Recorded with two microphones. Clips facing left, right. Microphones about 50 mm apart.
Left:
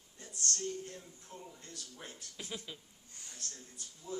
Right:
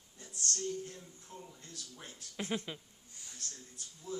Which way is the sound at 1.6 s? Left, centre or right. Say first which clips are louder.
Even; left.